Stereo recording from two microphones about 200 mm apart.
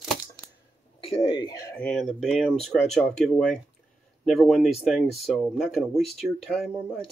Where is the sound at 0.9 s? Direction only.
25° left (ahead or behind).